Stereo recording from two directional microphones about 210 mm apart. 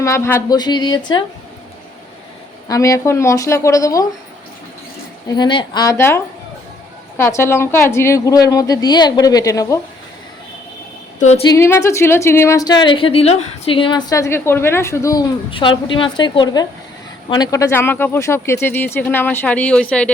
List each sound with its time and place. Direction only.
0.0 s speech: 15° left (ahead or behind)
2.6 s a woman's voice: 15° left (ahead or behind)
5.3 s a woman's voice: 20° left (ahead or behind)
11.4 s a woman's voice: 15° left (ahead or behind)